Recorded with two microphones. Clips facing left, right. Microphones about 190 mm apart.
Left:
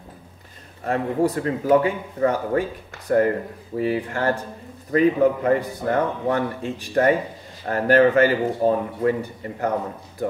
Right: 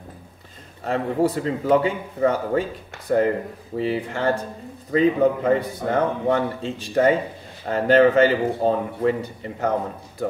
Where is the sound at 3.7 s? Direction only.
25° right (ahead or behind).